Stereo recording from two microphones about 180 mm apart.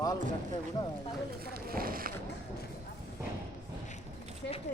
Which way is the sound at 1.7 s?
55° right (ahead or behind).